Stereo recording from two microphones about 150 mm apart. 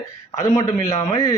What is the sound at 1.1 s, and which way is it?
Speech, 25° left (ahead or behind).